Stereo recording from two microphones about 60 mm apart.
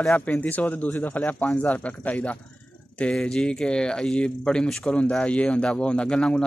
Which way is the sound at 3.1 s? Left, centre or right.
Centre.